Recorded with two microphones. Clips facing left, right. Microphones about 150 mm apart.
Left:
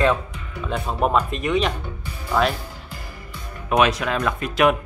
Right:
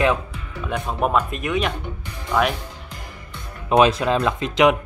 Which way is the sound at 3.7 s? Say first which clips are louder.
Right 3 dB; 30° right (ahead or behind).